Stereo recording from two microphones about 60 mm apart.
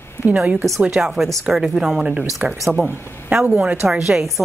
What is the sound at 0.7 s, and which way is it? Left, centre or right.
A woman's voice, centre.